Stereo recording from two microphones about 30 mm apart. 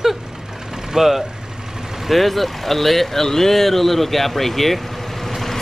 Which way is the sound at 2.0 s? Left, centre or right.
Centre.